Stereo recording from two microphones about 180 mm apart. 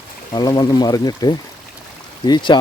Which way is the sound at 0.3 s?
20° left (ahead or behind).